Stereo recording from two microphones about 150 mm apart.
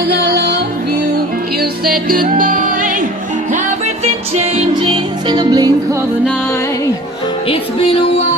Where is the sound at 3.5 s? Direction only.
50° right (ahead or behind); by 6.0 s 25° right (ahead or behind).